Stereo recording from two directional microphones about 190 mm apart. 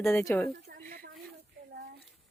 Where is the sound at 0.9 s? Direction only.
50° right (ahead or behind).